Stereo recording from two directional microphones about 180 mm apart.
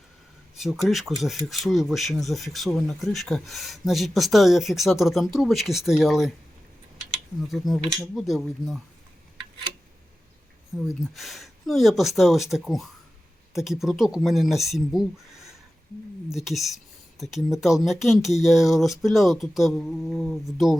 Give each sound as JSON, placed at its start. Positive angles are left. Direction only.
{"t": 0.5, "sound": "speech", "side_deg": 0}
{"t": 7.4, "sound": "speech", "side_deg": 0}
{"t": 10.7, "sound": "speech", "side_deg": 0}